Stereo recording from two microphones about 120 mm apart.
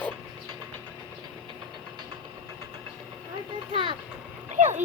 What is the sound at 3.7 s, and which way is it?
Vehicle, 45° right (ahead or behind).